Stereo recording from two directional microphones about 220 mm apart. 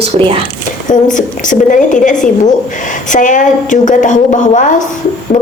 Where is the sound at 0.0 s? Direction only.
25° right (ahead or behind).